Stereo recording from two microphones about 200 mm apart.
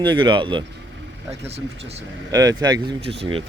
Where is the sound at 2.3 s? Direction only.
20° right (ahead or behind).